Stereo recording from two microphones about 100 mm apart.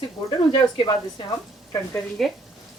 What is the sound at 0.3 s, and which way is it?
A woman's voice, 45° left (ahead or behind).